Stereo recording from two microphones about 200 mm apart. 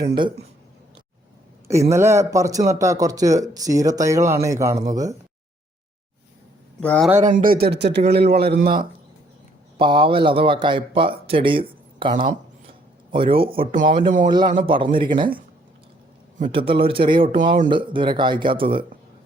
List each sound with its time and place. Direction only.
0.1 s speech: 25° right (ahead or behind)
1.6 s speech: 15° right (ahead or behind)
6.7 s speech: 5° left (ahead or behind)
7.2 s speech: 40° right (ahead or behind)
9.7 s speech: 25° right (ahead or behind)
16.4 s speech: 25° right (ahead or behind)